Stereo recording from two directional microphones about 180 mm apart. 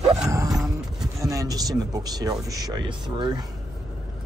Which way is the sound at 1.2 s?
20° right (ahead or behind).